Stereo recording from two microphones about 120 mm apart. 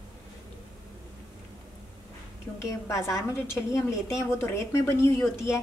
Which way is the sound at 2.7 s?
25° left (ahead or behind).